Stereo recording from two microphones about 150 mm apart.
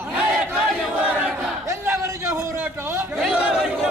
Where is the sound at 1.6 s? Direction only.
20° right (ahead or behind).